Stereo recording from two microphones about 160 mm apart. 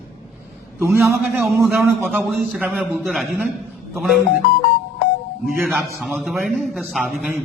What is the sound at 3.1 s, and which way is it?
A man's voice, centre (ahead or behind).